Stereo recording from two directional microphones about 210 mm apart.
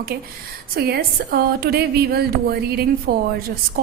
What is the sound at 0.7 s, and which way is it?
Speech, 50° right (ahead or behind).